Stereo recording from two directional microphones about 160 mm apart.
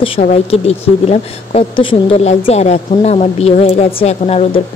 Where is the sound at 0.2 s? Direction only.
40° left (ahead or behind).